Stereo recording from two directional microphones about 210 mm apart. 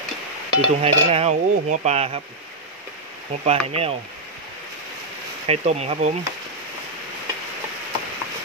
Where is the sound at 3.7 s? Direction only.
30° right (ahead or behind).